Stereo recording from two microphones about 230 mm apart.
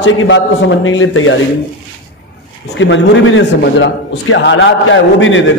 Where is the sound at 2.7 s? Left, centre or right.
Left.